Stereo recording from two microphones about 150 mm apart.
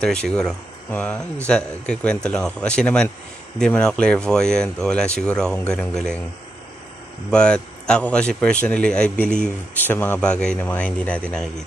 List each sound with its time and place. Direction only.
0.3 s a man's voice: 5° left (ahead or behind)
7.2 s a man's voice: 5° left (ahead or behind)